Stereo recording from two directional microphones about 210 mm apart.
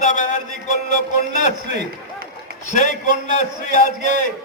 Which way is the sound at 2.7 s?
35° left (ahead or behind).